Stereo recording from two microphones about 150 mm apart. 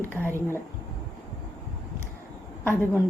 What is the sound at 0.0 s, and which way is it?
Speech, 15° left (ahead or behind).